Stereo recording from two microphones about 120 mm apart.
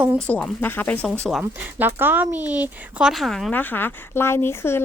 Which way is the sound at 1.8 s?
15° right (ahead or behind).